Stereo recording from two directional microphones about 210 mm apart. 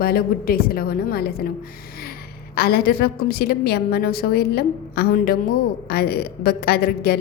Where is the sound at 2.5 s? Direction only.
45° left (ahead or behind).